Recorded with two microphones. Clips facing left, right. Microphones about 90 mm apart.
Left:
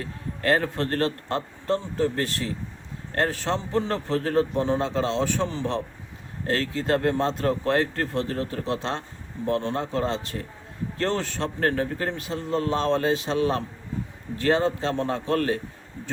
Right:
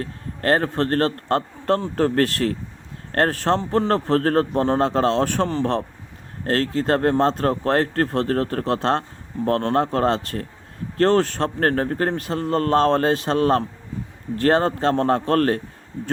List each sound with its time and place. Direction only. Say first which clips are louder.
0.0 s a man's voice: right 3 dB; 45° right (ahead or behind)